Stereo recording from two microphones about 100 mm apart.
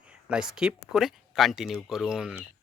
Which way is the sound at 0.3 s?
5° right (ahead or behind).